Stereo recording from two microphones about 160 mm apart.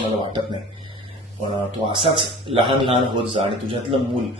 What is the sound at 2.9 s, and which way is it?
Speech, 35° right (ahead or behind).